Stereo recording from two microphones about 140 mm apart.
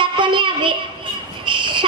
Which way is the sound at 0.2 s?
35° right (ahead or behind).